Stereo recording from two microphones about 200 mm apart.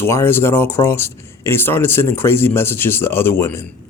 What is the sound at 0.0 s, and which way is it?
Speech, 10° left (ahead or behind).